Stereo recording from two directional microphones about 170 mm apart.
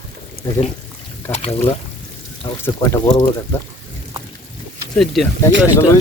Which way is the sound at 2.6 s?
15° left (ahead or behind).